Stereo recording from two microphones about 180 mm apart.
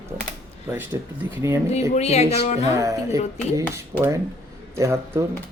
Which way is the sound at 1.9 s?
35° left (ahead or behind).